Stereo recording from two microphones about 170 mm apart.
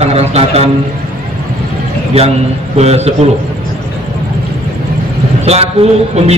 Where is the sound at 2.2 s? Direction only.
35° right (ahead or behind).